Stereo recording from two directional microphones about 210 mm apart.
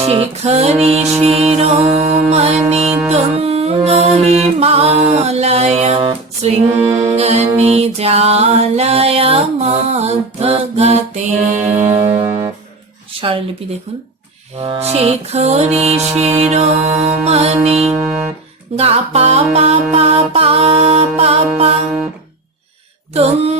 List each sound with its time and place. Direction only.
0.0 s music: 30° right (ahead or behind)
13.6 s music: 25° right (ahead or behind)
23.1 s music: 30° right (ahead or behind)